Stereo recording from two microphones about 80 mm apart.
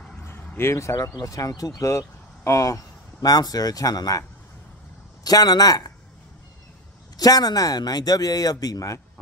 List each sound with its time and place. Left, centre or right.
0.6 s speech: left
1.8 s speech: left
5.2 s a man's voice: left
7.2 s speech: left